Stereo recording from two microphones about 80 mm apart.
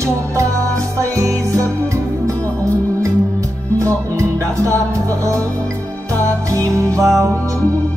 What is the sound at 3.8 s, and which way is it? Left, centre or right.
Music, right.